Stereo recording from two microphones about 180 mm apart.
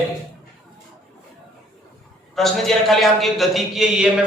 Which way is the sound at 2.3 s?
Centre (ahead or behind).